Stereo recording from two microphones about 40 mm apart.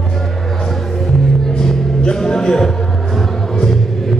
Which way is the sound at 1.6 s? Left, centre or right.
Centre.